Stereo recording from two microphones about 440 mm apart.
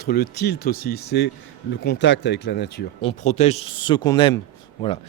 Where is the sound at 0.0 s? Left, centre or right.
Left.